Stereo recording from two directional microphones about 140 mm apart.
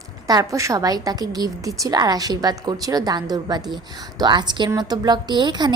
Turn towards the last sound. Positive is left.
turn(degrees=-30)  # may be behind; listen again after turning